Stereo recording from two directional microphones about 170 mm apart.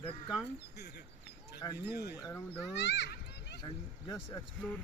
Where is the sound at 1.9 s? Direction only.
70° left (ahead or behind).